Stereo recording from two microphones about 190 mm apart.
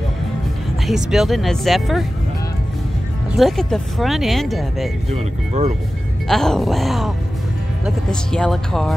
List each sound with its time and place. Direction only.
0.8 s speech: centre (ahead or behind)
3.3 s speech: centre (ahead or behind)
5.1 s speech: 35° right (ahead or behind)
6.2 s speech: centre (ahead or behind)